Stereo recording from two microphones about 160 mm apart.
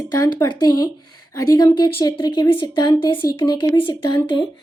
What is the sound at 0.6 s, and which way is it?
A woman's voice, 25° left (ahead or behind).